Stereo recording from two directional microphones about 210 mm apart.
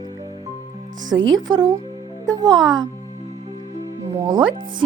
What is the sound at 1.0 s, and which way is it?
Speech, 65° right (ahead or behind).